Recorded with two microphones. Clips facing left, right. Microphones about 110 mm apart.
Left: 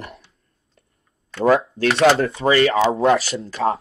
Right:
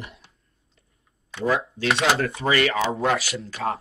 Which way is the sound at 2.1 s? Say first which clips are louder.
Left 5 dB; 25° left (ahead or behind).